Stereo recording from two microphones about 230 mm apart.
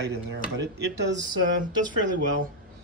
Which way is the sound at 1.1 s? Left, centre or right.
Centre.